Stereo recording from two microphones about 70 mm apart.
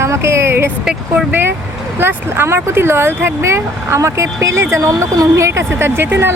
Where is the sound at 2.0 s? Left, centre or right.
Right.